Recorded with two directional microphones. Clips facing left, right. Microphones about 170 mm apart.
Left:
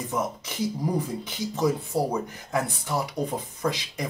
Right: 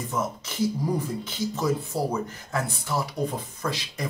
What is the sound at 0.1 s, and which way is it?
Speech, 15° left (ahead or behind).